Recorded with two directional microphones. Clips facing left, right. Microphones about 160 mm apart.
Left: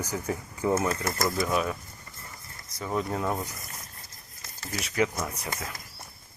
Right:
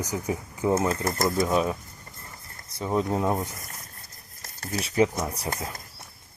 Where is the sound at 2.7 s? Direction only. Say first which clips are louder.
Right 4 dB; 25° right (ahead or behind).